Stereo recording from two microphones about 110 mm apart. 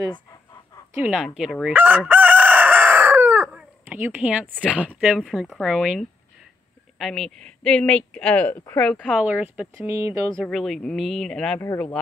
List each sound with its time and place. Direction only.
1.0 s speech: 5° right (ahead or behind)
1.7 s chicken: 15° right (ahead or behind)
3.8 s speech: 15° right (ahead or behind); by 9.0 s 15° left (ahead or behind)
9.0 s speech: 10° right (ahead or behind); by 10.3 s 25° right (ahead or behind)
10.3 s speech: centre (ahead or behind)